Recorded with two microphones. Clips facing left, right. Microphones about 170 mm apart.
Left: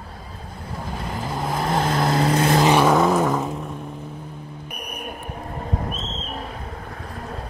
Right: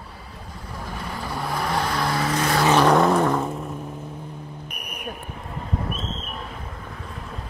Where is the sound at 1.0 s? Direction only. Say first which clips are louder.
Left 2 dB; 20° left (ahead or behind).